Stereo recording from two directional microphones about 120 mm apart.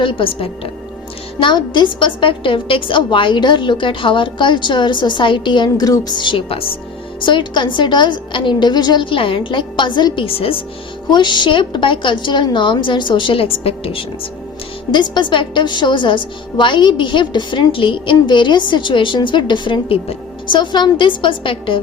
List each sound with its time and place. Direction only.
0.0 s a woman's voice: 45° left (ahead or behind)
11.1 s a woman's voice: 40° left (ahead or behind)
14.9 s a woman's voice: 40° left (ahead or behind)